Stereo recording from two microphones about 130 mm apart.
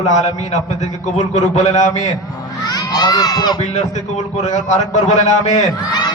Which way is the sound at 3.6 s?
60° left (ahead or behind).